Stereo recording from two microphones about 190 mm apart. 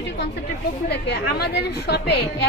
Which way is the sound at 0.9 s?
60° left (ahead or behind).